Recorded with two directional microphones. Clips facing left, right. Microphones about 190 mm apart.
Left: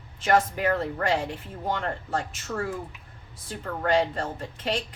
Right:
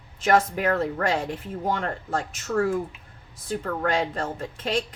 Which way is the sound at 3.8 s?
45° right (ahead or behind).